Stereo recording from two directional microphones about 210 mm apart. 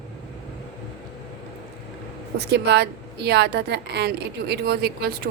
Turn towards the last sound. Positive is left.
turn(degrees=-50)  # may be behind; listen again after turning